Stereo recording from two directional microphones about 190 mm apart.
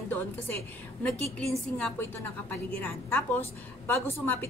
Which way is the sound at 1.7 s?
10° left (ahead or behind).